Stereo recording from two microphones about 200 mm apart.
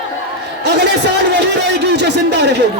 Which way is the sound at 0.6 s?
55° right (ahead or behind).